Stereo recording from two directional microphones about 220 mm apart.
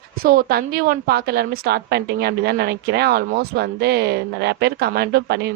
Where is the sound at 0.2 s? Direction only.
40° right (ahead or behind).